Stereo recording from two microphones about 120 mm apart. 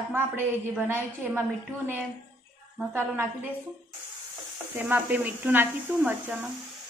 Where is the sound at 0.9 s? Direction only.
20° right (ahead or behind).